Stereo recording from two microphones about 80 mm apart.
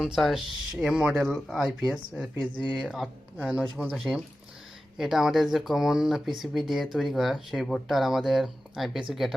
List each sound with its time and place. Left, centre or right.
0.0 s speech: centre